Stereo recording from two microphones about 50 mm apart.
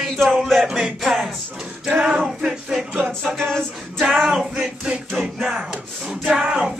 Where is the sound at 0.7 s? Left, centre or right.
Centre.